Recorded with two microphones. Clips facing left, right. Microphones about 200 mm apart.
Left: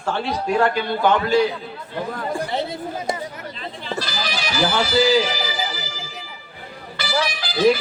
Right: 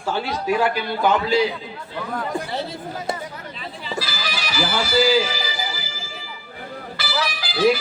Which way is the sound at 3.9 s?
5° right (ahead or behind).